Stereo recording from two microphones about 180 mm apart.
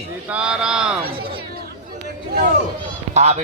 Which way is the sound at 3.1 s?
40° right (ahead or behind).